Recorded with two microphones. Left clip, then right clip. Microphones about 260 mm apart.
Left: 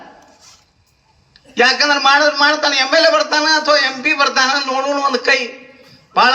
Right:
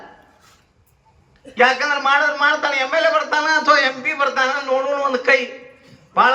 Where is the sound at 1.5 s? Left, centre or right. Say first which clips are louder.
Left 3 dB; left.